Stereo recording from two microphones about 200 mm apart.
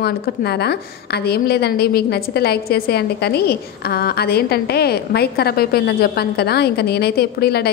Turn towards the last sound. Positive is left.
turn(degrees=50)  # may be behind; listen again after turning